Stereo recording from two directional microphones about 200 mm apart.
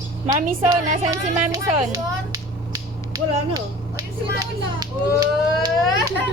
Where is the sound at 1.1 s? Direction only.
15° right (ahead or behind).